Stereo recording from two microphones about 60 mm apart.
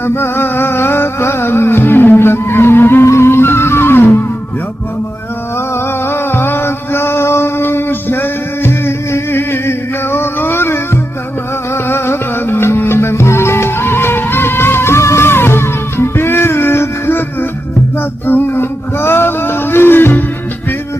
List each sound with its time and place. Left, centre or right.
0.0 s music: left
5.5 s music: left
18.3 s a sound: left